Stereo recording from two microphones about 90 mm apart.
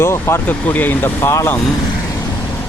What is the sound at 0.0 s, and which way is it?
Speech, 30° left (ahead or behind).